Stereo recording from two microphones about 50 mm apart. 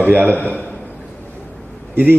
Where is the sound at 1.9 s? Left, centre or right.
Right.